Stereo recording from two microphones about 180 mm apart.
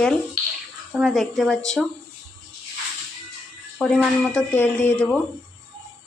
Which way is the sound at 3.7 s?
Centre (ahead or behind).